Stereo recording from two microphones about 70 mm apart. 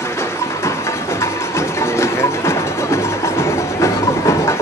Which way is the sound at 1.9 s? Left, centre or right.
Left.